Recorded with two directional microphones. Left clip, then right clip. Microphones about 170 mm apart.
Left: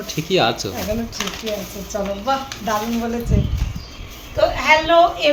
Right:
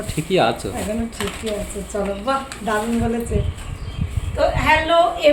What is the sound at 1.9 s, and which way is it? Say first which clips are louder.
Speech: even; 5° left (ahead or behind).